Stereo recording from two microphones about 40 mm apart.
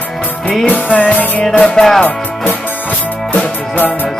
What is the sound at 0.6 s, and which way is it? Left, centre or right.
Music, left.